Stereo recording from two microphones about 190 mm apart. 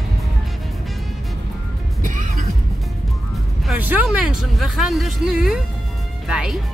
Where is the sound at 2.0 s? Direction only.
45° right (ahead or behind).